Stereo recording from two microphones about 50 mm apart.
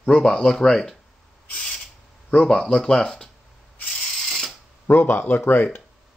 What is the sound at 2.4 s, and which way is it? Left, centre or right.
Speech, centre.